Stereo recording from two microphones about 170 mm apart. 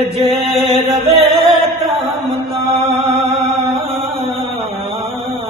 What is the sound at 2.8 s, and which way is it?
Mantra, 35° right (ahead or behind).